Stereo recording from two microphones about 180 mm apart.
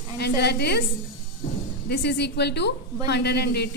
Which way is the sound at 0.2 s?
70° left (ahead or behind).